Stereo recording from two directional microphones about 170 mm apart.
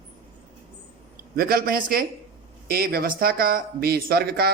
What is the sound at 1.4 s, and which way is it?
Speech, 60° right (ahead or behind).